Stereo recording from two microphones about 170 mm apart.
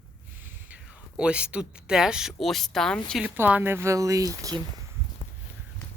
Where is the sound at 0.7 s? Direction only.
5° right (ahead or behind).